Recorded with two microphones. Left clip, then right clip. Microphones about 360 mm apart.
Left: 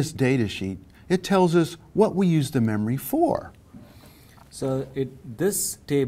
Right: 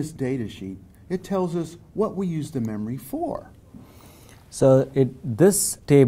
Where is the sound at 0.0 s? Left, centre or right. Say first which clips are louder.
Left 4 dB; left.